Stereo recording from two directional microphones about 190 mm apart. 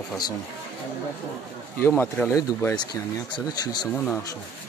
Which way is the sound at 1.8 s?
10° left (ahead or behind).